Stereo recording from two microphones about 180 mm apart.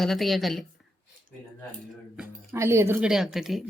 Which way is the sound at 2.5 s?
15° right (ahead or behind).